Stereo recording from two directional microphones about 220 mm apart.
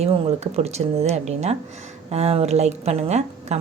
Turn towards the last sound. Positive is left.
turn(degrees=-30)  # may be behind; listen again after turning